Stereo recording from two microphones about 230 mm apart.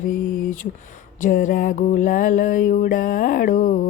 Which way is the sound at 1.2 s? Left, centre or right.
Left.